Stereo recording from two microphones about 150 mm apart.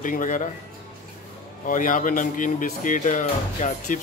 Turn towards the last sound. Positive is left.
turn(degrees=55)  # may be behind; listen again after turning